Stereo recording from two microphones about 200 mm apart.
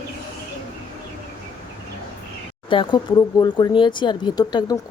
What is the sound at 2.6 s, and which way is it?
Speech, 25° left (ahead or behind).